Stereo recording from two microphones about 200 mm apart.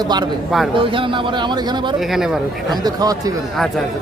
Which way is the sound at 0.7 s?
25° right (ahead or behind).